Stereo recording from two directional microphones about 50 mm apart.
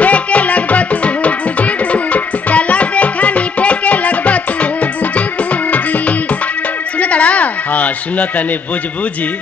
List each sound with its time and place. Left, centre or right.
0.0 s music: left
7.0 s bleat: left